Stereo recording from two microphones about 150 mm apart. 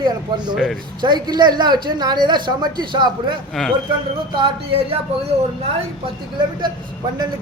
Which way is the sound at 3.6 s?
Centre (ahead or behind).